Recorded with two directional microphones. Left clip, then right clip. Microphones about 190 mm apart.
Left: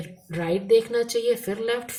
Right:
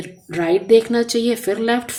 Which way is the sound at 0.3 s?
35° right (ahead or behind).